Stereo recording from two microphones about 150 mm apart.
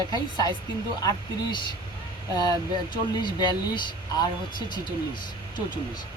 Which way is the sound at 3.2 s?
30° left (ahead or behind).